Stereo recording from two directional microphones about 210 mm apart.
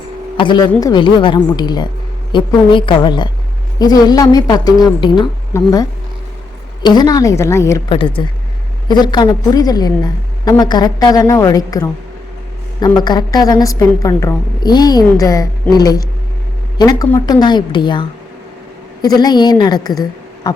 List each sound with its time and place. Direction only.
0.3 s a woman's voice: 20° left (ahead or behind)
7.9 s a woman's voice: 25° left (ahead or behind)
19.0 s a woman's voice: 20° left (ahead or behind)